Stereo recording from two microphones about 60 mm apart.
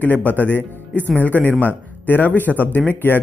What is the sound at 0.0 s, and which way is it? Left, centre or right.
Speech, left.